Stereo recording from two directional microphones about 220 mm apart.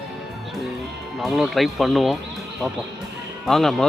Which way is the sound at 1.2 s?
Centre (ahead or behind).